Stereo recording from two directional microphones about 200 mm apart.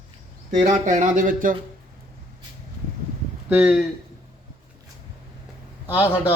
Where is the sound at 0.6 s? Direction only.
35° right (ahead or behind).